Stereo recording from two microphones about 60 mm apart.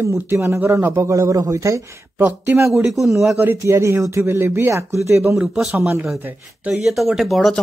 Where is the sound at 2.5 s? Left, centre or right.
Right.